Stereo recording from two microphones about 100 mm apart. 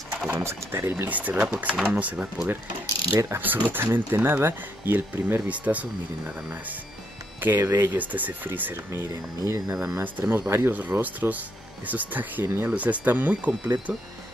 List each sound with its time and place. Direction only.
0.3 s speech: 25° right (ahead or behind)
3.1 s speech: 25° right (ahead or behind)
7.3 s speech: 20° right (ahead or behind)
9.1 s speech: 35° right (ahead or behind)
9.9 s speech: 20° right (ahead or behind)